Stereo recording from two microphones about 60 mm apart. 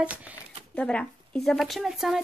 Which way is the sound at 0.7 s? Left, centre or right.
Centre.